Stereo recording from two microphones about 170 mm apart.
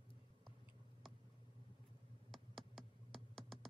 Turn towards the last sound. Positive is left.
turn(degrees=0)  # may be behind; listen again after turning